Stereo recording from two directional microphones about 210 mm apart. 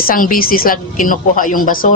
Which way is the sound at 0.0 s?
40° left (ahead or behind).